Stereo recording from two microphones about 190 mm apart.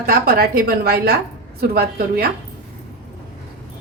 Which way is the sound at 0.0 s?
50° right (ahead or behind).